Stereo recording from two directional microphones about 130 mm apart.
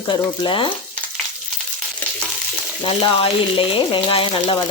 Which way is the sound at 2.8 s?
40° left (ahead or behind).